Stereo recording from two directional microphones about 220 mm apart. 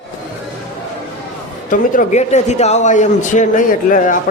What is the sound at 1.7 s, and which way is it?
Speech, 35° left (ahead or behind).